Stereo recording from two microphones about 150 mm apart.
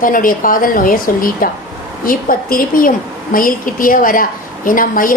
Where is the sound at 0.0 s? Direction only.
65° left (ahead or behind).